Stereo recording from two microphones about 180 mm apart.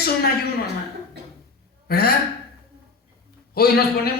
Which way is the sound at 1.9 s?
60° left (ahead or behind).